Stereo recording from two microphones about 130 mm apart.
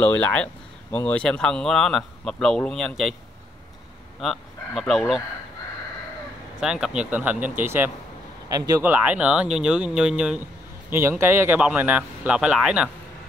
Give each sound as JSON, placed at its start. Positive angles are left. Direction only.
{"t": 0.0, "sound": "speech", "side_deg": 10}
{"t": 4.2, "sound": "speech", "side_deg": 0}
{"t": 6.6, "sound": "speech", "side_deg": -5}
{"t": 8.5, "sound": "speech", "side_deg": -30}
{"t": 8.8, "sound": "speech", "side_deg": -15}
{"t": 10.9, "sound": "speech", "side_deg": -20}